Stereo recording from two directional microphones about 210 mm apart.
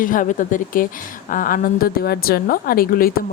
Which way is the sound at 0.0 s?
40° left (ahead or behind).